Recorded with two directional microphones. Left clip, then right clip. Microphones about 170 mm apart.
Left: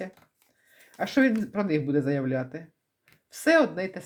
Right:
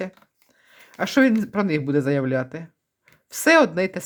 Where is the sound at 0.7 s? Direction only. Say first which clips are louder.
Right 5 dB; 30° right (ahead or behind).